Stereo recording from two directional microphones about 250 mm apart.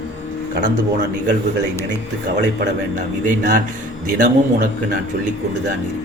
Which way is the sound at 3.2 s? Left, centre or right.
Right.